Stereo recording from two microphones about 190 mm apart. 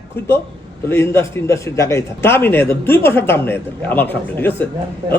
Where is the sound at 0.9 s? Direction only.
15° left (ahead or behind).